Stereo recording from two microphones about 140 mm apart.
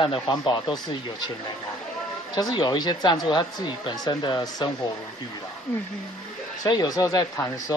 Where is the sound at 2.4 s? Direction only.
30° left (ahead or behind).